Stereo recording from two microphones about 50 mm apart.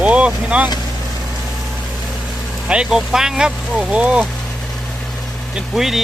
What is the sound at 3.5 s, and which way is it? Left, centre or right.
Speech, right.